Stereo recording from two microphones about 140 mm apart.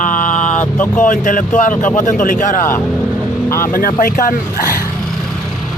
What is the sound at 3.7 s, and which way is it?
Speech, 90° left.